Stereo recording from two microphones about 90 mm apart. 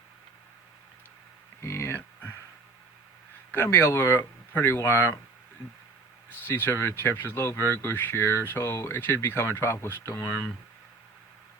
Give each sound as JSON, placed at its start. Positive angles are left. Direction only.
{"t": 1.6, "sound": "a sound", "side_deg": 30}
{"t": 3.5, "sound": "speech", "side_deg": 25}
{"t": 6.5, "sound": "speech", "side_deg": 25}